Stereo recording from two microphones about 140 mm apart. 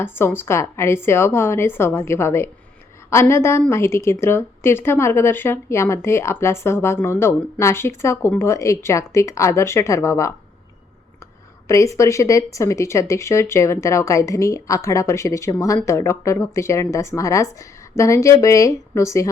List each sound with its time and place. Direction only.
0.0 s a woman's voice: 15° left (ahead or behind)
11.7 s speech: 20° left (ahead or behind)